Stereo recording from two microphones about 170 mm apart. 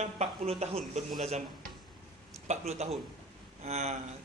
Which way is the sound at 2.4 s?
40° right (ahead or behind).